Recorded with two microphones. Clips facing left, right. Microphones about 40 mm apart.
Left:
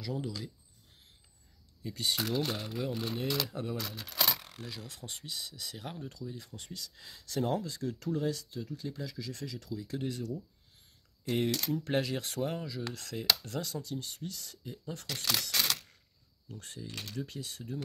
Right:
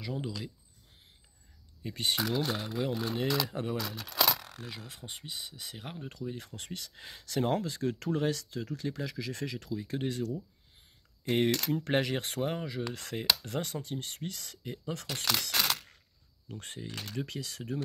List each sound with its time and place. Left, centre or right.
0.0 s speech: right
1.8 s speech: right
2.5 s speech: right
4.6 s speech: right
6.0 s speech: right
11.3 s speech: right
15.4 s a sound: right
16.4 s speech: right
17.2 s speech: right